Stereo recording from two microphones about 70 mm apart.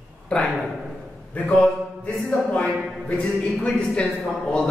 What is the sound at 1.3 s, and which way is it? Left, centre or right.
Speech, left.